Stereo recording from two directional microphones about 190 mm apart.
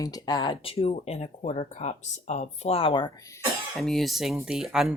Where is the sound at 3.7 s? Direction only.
Centre (ahead or behind).